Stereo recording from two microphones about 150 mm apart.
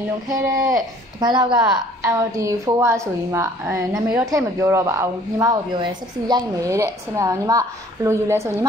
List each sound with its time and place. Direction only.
0.3 s a woman's voice: 20° right (ahead or behind)